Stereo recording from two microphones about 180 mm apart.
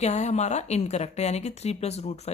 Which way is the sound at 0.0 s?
40° left (ahead or behind).